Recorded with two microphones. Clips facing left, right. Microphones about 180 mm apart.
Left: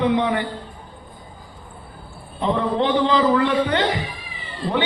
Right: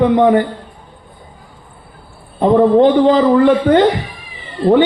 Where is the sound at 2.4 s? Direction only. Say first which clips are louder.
Right 11 dB; 50° right (ahead or behind).